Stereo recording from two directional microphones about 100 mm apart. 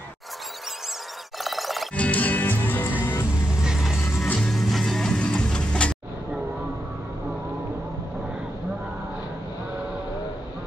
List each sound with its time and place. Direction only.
1.4 s music: centre (ahead or behind)
2.0 s music: 15° left (ahead or behind)
3.6 s music: 5° right (ahead or behind)